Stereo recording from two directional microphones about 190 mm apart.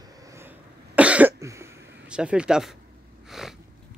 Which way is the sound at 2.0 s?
5° right (ahead or behind).